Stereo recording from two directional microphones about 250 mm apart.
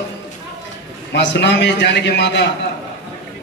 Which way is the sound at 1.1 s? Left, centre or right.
Left.